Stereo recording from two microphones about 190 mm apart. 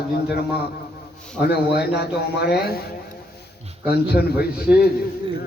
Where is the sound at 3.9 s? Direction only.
55° left (ahead or behind).